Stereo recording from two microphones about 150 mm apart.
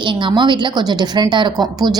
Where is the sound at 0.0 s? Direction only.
30° right (ahead or behind).